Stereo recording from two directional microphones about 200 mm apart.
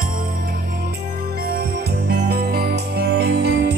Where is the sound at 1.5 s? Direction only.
50° right (ahead or behind).